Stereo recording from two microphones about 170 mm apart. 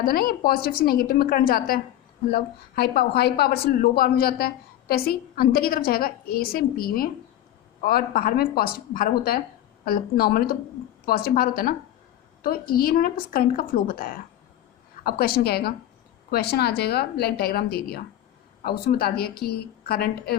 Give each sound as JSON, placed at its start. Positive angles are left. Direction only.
{"t": 0.0, "sound": "a woman's voice", "side_deg": 60}